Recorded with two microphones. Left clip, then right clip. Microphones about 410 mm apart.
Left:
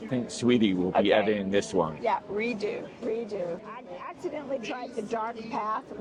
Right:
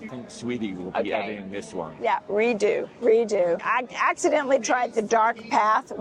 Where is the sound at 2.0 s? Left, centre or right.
Right.